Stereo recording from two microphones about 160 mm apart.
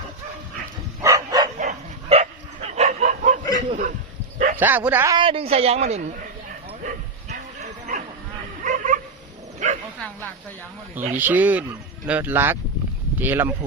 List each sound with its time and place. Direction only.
1.0 s dog: 20° right (ahead or behind)
1.5 s bow-wow: 45° right (ahead or behind)
3.7 s a sound: 55° right (ahead or behind)
4.6 s speech: 10° right (ahead or behind)
5.1 s a woman's voice: 35° right (ahead or behind)
6.8 s bow-wow: 50° right (ahead or behind)
11.1 s speech: 10° right (ahead or behind)